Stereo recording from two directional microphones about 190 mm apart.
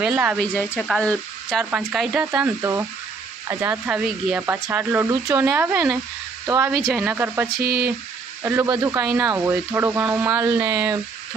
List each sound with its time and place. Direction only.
0.0 s speech: 5° right (ahead or behind)
0.3 s speech: 10° left (ahead or behind); by 6.7 s 15° right (ahead or behind)
6.7 s speech: 5° right (ahead or behind)
7.6 s speech: 55° right (ahead or behind)
8.6 s speech: 20° right (ahead or behind)